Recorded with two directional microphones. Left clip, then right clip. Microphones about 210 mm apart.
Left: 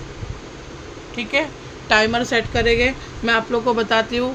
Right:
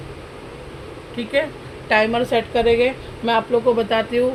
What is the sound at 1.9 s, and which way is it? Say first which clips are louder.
Speech: even; 50° left (ahead or behind).